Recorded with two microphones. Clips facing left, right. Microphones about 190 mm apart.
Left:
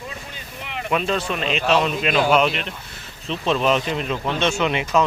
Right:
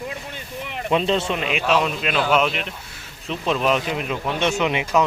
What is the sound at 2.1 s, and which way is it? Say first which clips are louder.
Speech: left 4 dB; 10° left (ahead or behind).